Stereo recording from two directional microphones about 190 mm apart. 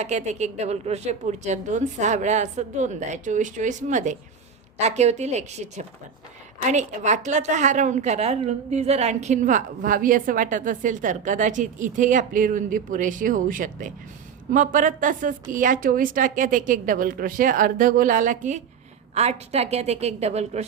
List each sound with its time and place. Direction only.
0.0 s a woman's voice: 35° right (ahead or behind)